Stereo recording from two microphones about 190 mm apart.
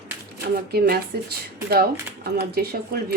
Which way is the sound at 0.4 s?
55° right (ahead or behind).